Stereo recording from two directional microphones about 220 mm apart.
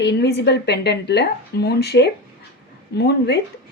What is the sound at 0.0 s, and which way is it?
Speech, 50° left (ahead or behind).